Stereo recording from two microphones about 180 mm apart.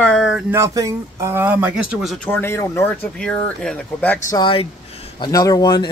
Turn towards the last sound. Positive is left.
turn(degrees=25)  # may be behind; listen again after turning